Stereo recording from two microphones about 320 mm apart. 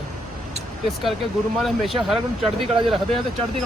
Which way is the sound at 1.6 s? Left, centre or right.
Centre.